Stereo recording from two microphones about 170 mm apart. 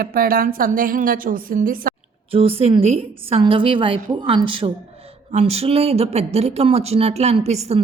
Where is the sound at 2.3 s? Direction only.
35° right (ahead or behind).